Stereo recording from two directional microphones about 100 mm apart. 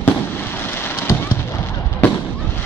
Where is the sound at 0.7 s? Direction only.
20° left (ahead or behind).